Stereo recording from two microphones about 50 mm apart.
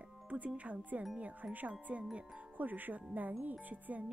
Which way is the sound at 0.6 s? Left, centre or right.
Right.